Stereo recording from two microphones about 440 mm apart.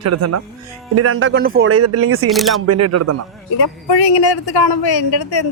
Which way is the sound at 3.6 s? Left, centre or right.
Left.